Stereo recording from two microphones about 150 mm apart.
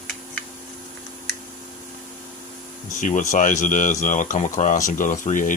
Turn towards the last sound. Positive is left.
turn(degrees=60)  # may be behind; listen again after turning